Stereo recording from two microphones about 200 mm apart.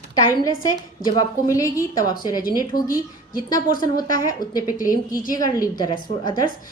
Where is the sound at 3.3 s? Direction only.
45° left (ahead or behind).